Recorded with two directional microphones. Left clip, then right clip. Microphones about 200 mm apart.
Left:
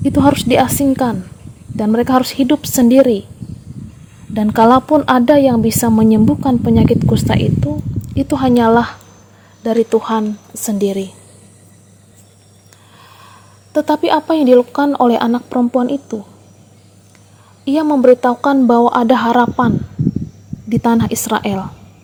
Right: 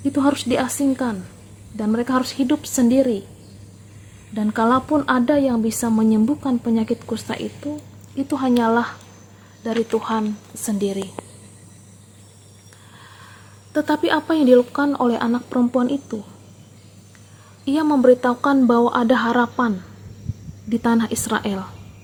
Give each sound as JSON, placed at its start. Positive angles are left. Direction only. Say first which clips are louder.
{"t": 0.0, "sound": "a woman's voice", "louder": "left 7 dB", "side_deg": 40}
{"t": 4.4, "sound": "a woman's voice", "louder": "left 9 dB", "side_deg": 40}
{"t": 13.7, "sound": "speech", "louder": "left 6 dB", "side_deg": 25}
{"t": 17.7, "sound": "a woman's voice", "louder": "left 5 dB", "side_deg": 25}